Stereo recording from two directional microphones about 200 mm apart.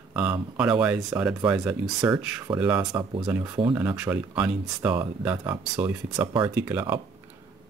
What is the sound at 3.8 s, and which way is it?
Speech, 10° right (ahead or behind).